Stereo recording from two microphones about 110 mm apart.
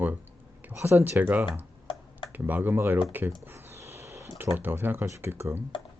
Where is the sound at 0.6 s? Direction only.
20° right (ahead or behind).